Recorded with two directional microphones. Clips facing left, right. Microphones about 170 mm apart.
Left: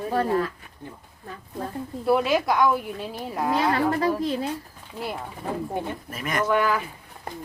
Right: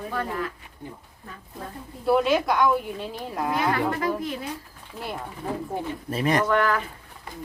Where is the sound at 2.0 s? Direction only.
Centre (ahead or behind).